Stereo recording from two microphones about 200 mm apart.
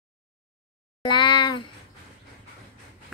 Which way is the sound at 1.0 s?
20° left (ahead or behind).